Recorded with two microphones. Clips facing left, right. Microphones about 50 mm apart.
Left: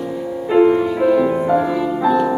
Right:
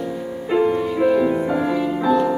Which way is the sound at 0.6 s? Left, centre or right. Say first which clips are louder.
Left 6 dB; centre.